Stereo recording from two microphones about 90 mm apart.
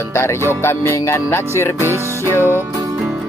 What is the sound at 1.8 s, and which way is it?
Music, 25° right (ahead or behind).